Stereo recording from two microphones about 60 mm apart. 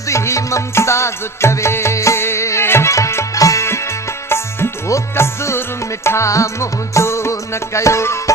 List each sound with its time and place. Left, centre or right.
0.1 s music: left
3.3 s music: left
4.9 s music: left